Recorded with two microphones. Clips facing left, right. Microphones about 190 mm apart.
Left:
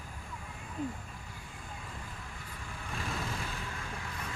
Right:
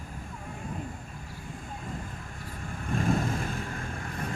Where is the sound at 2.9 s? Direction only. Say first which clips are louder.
Right 11 dB; 45° right (ahead or behind).